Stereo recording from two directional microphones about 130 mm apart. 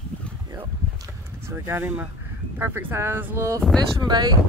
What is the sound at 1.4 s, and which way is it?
Speech, 20° right (ahead or behind).